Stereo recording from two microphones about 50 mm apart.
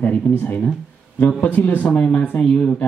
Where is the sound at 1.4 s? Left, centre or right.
Left.